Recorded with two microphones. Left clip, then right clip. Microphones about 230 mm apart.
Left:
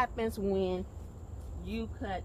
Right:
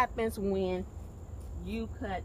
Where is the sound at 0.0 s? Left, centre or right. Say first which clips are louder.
Right 2 dB; centre.